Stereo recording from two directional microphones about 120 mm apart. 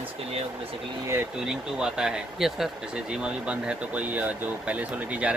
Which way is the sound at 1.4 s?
5° right (ahead or behind).